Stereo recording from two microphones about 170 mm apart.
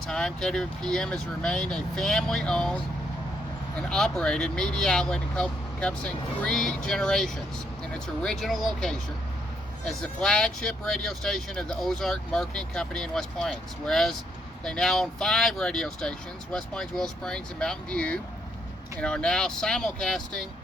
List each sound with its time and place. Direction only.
0.1 s speech: 5° left (ahead or behind)
3.8 s speech: 5° left (ahead or behind)